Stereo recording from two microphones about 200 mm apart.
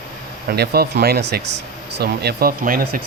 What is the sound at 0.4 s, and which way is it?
Speech, 55° right (ahead or behind).